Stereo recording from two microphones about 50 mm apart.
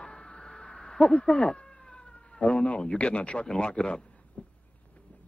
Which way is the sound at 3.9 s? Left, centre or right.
Centre.